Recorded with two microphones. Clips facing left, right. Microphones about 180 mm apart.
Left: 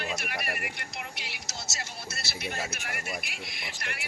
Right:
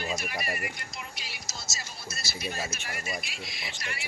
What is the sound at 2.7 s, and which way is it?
Speech, 65° left (ahead or behind).